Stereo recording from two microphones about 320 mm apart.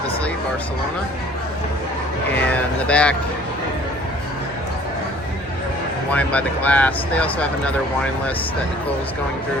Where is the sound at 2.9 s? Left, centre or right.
Centre.